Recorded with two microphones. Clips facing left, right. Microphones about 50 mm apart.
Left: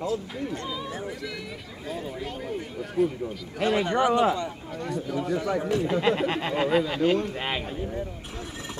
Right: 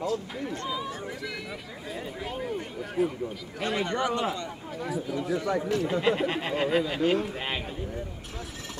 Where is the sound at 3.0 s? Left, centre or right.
Centre.